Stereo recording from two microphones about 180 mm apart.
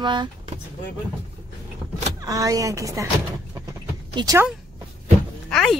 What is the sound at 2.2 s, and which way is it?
Speech, 20° right (ahead or behind).